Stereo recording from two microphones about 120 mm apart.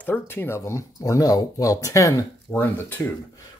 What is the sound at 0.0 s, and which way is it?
Speech, 15° left (ahead or behind).